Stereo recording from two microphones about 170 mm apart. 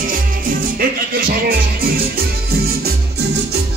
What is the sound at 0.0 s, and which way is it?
Music, 55° right (ahead or behind).